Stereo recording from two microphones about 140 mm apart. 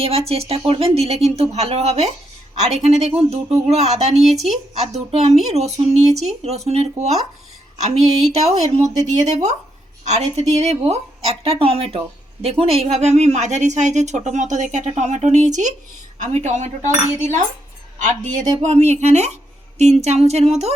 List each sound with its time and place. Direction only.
0.0 s speech: 45° right (ahead or behind)
4.3 s speech: centre (ahead or behind)
4.8 s speech: 50° right (ahead or behind)
9.0 s cutlery: 55° right (ahead or behind)
10.0 s speech: 55° right (ahead or behind)
16.1 s cutlery: 60° right (ahead or behind)
18.6 s speech: 55° right (ahead or behind)